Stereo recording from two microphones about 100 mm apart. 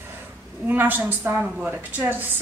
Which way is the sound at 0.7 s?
20° right (ahead or behind).